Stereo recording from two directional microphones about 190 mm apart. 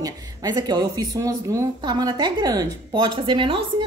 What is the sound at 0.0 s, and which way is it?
Speech, 20° right (ahead or behind).